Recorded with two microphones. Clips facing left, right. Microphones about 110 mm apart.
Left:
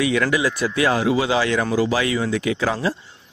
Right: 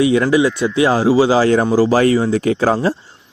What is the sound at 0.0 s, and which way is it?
A man's voice, 25° right (ahead or behind).